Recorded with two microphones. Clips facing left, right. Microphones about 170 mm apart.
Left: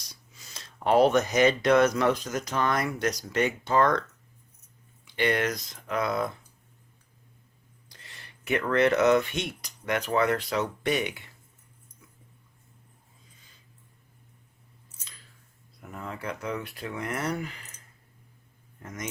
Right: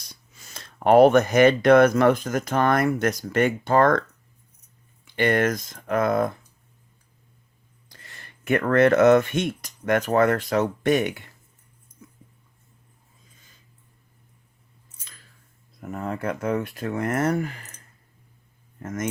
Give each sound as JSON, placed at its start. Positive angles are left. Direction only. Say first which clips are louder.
{"t": 0.1, "sound": "speech", "louder": "right 4 dB", "side_deg": -50}
{"t": 5.0, "sound": "speech", "louder": "right 5 dB", "side_deg": -50}
{"t": 8.0, "sound": "speech", "louder": "right 7 dB", "side_deg": -50}
{"t": 12.0, "sound": "a sound", "louder": "right 10 dB", "side_deg": -40}
{"t": 15.8, "sound": "speech", "louder": "right 8 dB", "side_deg": -45}
{"t": 18.8, "sound": "speech", "louder": "right 9 dB", "side_deg": -50}